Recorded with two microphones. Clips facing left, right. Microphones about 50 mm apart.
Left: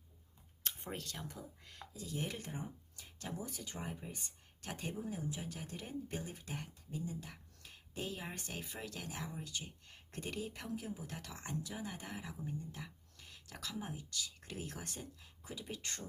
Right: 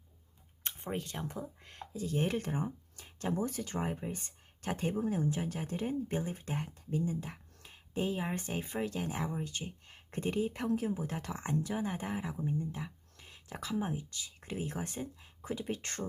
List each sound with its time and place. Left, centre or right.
0.6 s speech: centre; by 2.4 s right
2.4 s speech: right
3.3 s speech: right
4.9 s speech: right
10.5 s speech: right
11.9 s speech: right
12.7 s a sound: right
13.7 s speech: right
15.0 s speech: right